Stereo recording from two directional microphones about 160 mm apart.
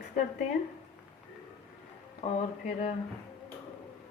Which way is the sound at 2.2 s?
50° left (ahead or behind).